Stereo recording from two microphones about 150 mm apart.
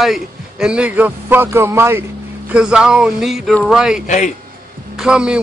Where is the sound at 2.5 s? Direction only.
5° right (ahead or behind).